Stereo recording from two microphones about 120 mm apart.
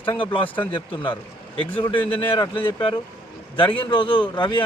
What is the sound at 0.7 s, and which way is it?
A man's voice, 45° left (ahead or behind).